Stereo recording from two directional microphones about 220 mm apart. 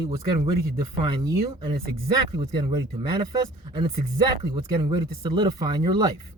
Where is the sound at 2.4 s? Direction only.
20° right (ahead or behind).